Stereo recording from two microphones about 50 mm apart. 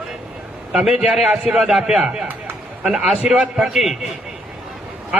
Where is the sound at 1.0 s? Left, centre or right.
Centre.